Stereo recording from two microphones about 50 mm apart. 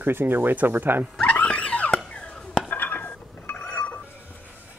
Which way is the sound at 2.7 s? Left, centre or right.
Left.